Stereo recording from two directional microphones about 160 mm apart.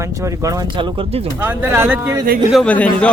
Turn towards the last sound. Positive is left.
turn(degrees=10)  # may be behind; listen again after turning